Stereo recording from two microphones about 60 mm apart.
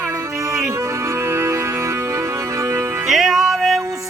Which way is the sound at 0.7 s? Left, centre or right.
Right.